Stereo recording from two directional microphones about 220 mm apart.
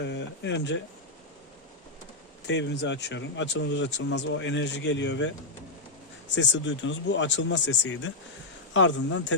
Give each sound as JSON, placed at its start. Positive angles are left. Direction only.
{"t": 0.0, "sound": "speech", "side_deg": 55}
{"t": 2.5, "sound": "speech", "side_deg": 55}
{"t": 6.3, "sound": "speech", "side_deg": 55}